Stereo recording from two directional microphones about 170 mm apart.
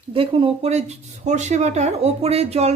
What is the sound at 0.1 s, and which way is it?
Speech, 30° right (ahead or behind).